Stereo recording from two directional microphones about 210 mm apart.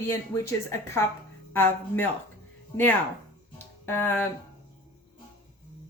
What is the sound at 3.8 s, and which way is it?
Speech, 10° left (ahead or behind).